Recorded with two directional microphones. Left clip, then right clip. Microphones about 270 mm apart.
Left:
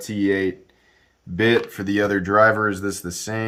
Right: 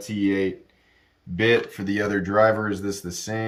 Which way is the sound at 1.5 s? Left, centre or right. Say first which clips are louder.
Left 1 dB; centre.